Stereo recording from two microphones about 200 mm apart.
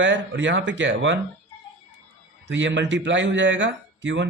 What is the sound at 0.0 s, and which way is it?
Speech, 65° right (ahead or behind).